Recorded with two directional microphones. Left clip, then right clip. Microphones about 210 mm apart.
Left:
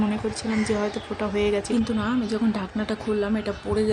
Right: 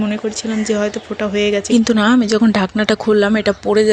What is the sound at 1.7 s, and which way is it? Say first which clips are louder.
A woman's voice: right 12 dB; 30° right (ahead or behind).